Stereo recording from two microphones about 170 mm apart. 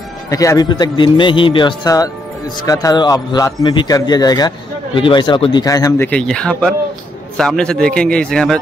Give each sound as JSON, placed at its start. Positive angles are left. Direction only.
{"t": 0.3, "sound": "a man's voice", "side_deg": 20}
{"t": 6.0, "sound": "a man's voice", "side_deg": 5}